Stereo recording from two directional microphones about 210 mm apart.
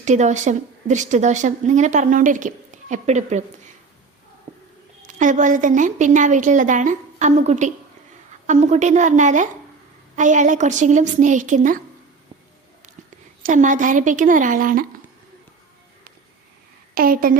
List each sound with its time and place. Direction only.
0.0 s a woman's voice: 35° right (ahead or behind)
5.0 s a woman's voice: 35° right (ahead or behind)
13.4 s a woman's voice: 35° right (ahead or behind)
16.9 s a woman's voice: 45° right (ahead or behind)